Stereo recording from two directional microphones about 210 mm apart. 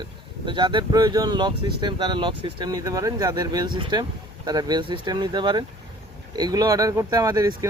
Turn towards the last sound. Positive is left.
turn(degrees=-15)  # may be behind; listen again after turning